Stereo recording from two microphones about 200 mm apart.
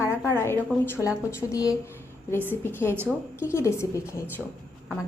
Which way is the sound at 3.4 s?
15° left (ahead or behind).